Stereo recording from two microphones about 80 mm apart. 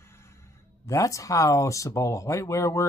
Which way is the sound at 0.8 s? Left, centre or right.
Left.